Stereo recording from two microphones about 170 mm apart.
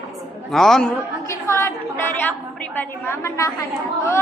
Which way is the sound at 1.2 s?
15° left (ahead or behind).